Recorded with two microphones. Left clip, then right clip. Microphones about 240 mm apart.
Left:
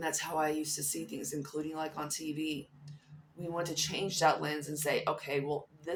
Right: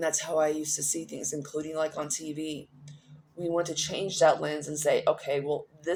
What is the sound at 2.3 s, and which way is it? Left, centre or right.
Speech, right.